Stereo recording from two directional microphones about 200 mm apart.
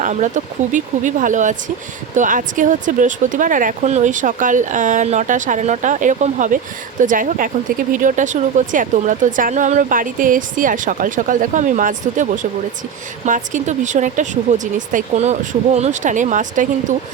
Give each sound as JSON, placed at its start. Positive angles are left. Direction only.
{"t": 0.0, "sound": "speech", "side_deg": -40}